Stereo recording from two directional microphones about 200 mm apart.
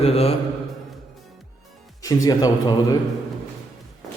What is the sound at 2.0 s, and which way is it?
A man's voice, 20° left (ahead or behind).